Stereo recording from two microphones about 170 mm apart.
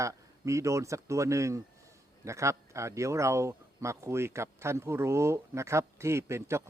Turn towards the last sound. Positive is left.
turn(degrees=-15)  # may be behind; listen again after turning